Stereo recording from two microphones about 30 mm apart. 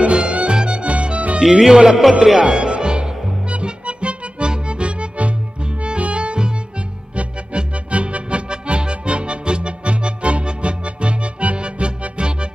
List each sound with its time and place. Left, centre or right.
0.0 s music: right
1.4 s speech: centre
2.4 s music: right